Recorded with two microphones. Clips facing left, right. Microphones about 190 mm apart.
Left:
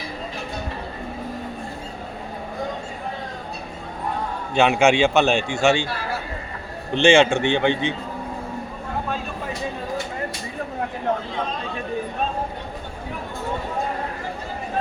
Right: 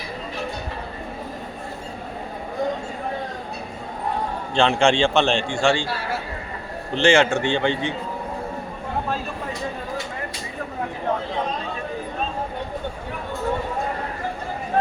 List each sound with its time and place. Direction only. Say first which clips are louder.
4.5 s a man's voice: left 1 dB; 5° left (ahead or behind)
5.6 s speech: left 2 dB; 20° left (ahead or behind)
6.9 s speech: left 2 dB; 25° left (ahead or behind)